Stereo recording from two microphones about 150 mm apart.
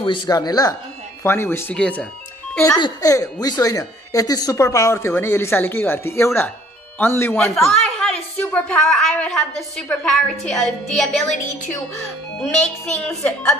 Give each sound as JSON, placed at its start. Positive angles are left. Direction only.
{"t": 0.0, "sound": "a woman's voice", "side_deg": 30}
{"t": 2.8, "sound": "a woman's voice", "side_deg": 25}
{"t": 7.4, "sound": "a woman's voice", "side_deg": 5}
{"t": 12.4, "sound": "a woman's voice", "side_deg": 5}